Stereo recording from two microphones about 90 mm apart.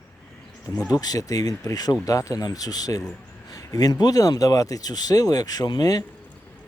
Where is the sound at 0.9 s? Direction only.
45° left (ahead or behind).